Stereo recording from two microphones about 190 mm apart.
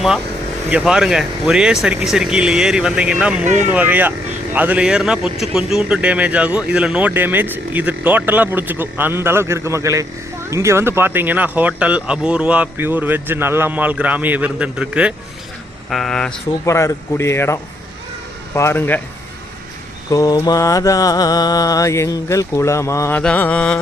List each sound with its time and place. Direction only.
0.7 s speech: 5° right (ahead or behind)
16.6 s mantra: 15° left (ahead or behind)
20.1 s mantra: 15° left (ahead or behind)